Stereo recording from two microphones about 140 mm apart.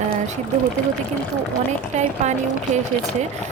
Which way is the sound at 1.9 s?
55° right (ahead or behind).